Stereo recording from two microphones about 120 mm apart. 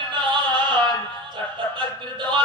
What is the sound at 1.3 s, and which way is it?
Music, 40° right (ahead or behind).